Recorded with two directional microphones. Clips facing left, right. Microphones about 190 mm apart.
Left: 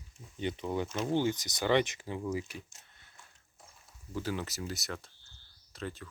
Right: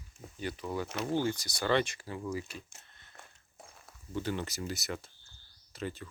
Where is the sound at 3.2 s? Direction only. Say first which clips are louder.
Right 5 dB; 65° right (ahead or behind).